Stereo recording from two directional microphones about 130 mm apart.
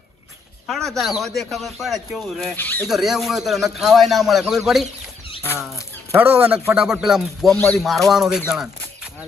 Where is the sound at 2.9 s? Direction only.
Centre (ahead or behind).